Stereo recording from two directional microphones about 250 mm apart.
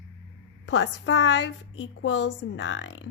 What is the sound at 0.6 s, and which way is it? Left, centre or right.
A woman's voice, left.